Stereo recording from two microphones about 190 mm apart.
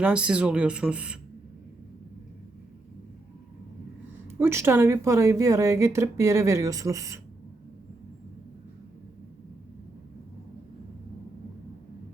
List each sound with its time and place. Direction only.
0.0 s speech: 5° right (ahead or behind)
4.4 s a woman's voice: 15° right (ahead or behind)